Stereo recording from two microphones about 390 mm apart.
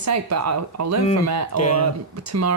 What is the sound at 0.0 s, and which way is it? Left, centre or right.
Speech, right.